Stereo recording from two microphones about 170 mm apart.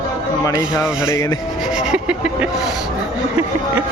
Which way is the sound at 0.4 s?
20° left (ahead or behind).